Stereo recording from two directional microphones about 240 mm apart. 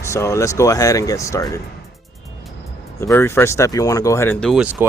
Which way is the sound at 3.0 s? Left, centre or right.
Centre.